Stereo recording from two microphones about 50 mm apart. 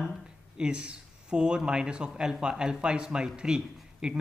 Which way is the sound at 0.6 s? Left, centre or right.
Centre.